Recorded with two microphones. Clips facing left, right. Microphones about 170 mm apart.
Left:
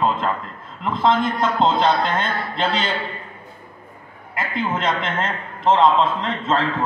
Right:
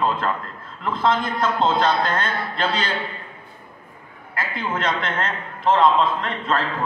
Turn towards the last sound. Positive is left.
turn(degrees=25)  # may be behind; listen again after turning